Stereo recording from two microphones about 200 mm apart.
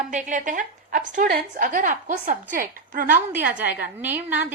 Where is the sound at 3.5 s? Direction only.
40° right (ahead or behind).